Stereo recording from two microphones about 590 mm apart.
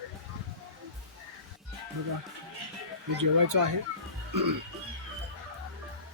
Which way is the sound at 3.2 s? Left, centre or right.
Right.